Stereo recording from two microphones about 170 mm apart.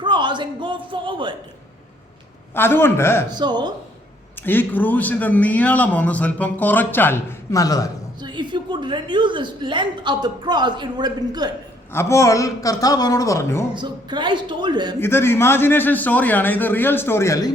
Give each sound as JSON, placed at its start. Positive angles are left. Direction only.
{"t": 0.0, "sound": "a woman's voice", "side_deg": -25}
{"t": 2.6, "sound": "a man's voice", "side_deg": 15}
{"t": 3.2, "sound": "a woman's voice", "side_deg": -25}
{"t": 4.4, "sound": "a man's voice", "side_deg": 10}
{"t": 8.2, "sound": "a woman's voice", "side_deg": -25}
{"t": 11.9, "sound": "a man's voice", "side_deg": 15}
{"t": 13.7, "sound": "a woman's voice", "side_deg": -25}
{"t": 14.9, "sound": "a man's voice", "side_deg": 15}